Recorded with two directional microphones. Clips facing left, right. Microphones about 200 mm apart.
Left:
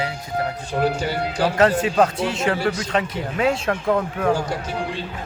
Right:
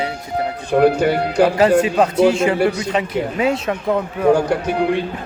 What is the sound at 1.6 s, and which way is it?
Speech, 5° right (ahead or behind).